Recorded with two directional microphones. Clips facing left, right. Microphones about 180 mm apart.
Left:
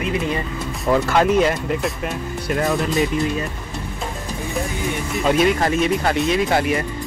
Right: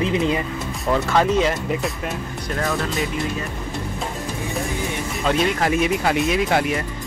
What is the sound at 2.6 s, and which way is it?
Speech, 20° left (ahead or behind).